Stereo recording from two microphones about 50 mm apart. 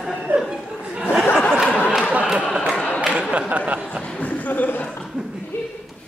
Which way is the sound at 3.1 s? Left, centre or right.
Right.